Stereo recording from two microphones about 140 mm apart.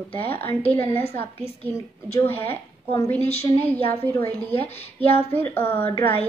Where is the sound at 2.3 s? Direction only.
15° left (ahead or behind).